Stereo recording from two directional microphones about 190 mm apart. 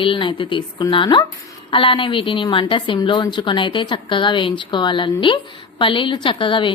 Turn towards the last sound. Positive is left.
turn(degrees=25)  # may be behind; listen again after turning